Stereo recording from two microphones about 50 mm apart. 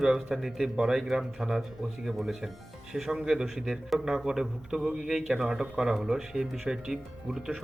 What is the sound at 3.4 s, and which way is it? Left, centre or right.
Speech, centre.